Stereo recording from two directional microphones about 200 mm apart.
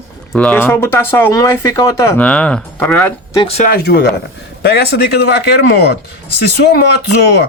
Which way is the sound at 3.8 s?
55° left (ahead or behind).